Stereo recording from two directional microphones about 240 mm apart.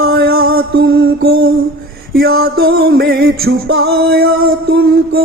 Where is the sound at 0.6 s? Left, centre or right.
Right.